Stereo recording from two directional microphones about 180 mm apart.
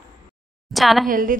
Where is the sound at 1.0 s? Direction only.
50° right (ahead or behind).